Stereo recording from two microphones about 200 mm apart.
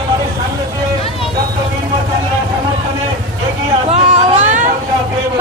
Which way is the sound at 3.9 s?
35° right (ahead or behind).